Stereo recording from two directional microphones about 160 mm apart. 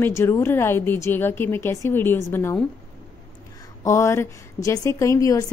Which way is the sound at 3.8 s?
20° left (ahead or behind).